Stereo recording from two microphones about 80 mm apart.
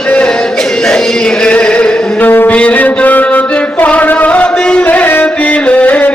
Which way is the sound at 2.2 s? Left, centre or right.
Left.